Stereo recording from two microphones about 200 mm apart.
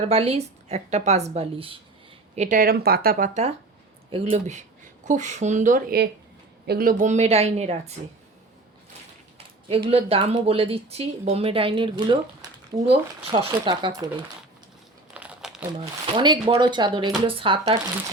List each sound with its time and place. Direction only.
0.1 s a woman's voice: 30° right (ahead or behind)
9.6 s speech: 30° right (ahead or behind)
15.1 s crumpling: 5° right (ahead or behind)
15.8 s speech: 25° right (ahead or behind)